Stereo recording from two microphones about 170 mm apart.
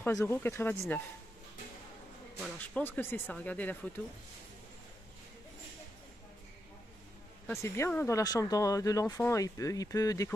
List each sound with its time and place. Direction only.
0.0 s speech: 15° left (ahead or behind)
2.6 s speech: 10° left (ahead or behind)
7.6 s speech: 15° left (ahead or behind)